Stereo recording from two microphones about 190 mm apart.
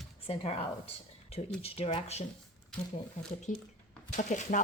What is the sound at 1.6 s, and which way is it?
Speech, 30° left (ahead or behind).